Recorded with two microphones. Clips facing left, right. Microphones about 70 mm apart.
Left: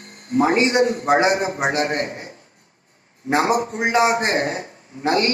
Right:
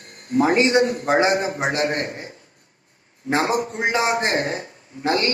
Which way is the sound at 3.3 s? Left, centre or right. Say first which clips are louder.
Left 2 dB; left.